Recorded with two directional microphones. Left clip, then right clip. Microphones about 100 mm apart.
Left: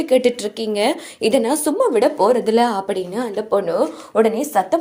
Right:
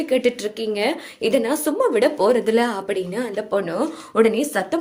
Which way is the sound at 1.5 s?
30° left (ahead or behind).